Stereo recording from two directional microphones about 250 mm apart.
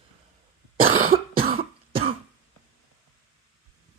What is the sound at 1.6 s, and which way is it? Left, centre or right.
Cough, right.